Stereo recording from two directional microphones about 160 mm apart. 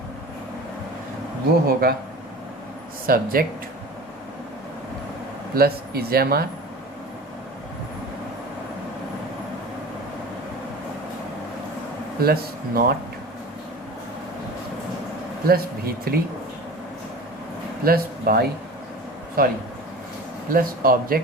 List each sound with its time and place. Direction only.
1.6 s speech: 70° right (ahead or behind)
3.1 s speech: 65° right (ahead or behind)
5.5 s speech: 75° right (ahead or behind)
12.2 s speech: 75° right (ahead or behind)
15.4 s speech: 70° right (ahead or behind)
17.8 s speech: 70° right (ahead or behind)